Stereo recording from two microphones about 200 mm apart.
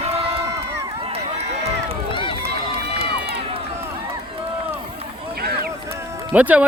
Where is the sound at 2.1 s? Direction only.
25° left (ahead or behind).